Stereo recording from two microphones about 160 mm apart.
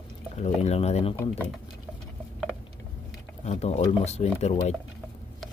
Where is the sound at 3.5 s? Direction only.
40° left (ahead or behind).